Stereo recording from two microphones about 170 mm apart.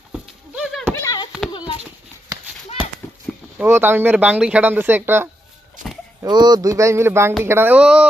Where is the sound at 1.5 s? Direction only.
25° left (ahead or behind).